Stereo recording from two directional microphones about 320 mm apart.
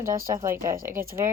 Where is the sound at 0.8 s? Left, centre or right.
Right.